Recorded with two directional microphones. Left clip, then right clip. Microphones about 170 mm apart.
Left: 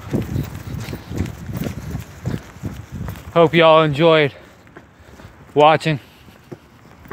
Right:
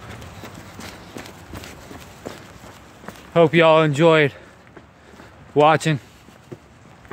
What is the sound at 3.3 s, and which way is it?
Speech, 5° right (ahead or behind).